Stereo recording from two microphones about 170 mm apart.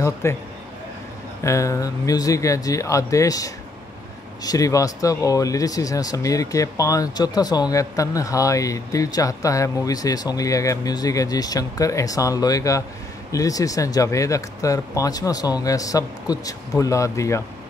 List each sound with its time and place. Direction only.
0.0 s a man's voice: 15° left (ahead or behind)
1.4 s speech: 20° left (ahead or behind)